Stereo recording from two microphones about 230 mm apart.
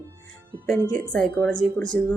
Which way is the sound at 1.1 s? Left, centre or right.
Centre.